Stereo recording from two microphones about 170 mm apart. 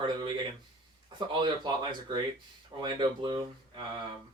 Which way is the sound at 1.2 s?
25° right (ahead or behind).